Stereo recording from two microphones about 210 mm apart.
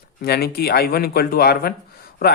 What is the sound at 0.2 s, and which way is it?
Speech, 50° left (ahead or behind).